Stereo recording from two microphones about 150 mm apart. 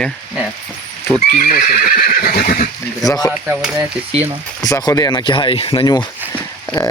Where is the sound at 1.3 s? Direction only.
65° left (ahead or behind); by 2.6 s 80° left.